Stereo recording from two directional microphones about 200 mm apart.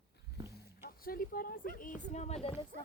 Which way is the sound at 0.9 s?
45° left (ahead or behind).